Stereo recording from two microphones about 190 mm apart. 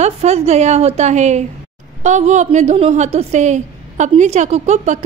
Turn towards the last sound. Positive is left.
turn(degrees=-40)  # may be behind; listen again after turning